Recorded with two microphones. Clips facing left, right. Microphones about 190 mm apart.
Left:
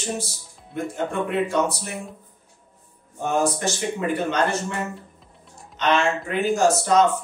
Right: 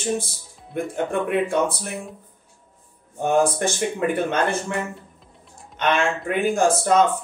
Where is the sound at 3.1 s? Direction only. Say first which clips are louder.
Right 3 dB; 55° right (ahead or behind).